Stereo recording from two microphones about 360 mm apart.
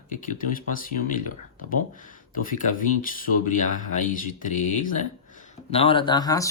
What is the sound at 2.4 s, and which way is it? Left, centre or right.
Speech, left.